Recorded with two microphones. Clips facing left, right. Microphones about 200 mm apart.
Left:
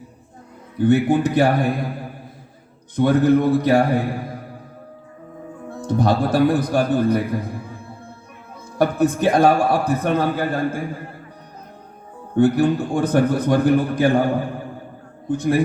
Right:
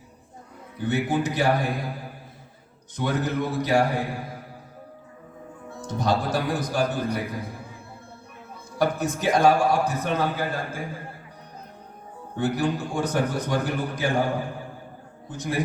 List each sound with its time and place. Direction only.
0.9 s a man's voice: 55° left (ahead or behind)
2.9 s a man's voice: 55° left (ahead or behind)
5.6 s a man's voice: 55° left (ahead or behind)
8.8 s a man's voice: 55° left (ahead or behind)
12.3 s a man's voice: 55° left (ahead or behind)
15.3 s a man's voice: 55° left (ahead or behind)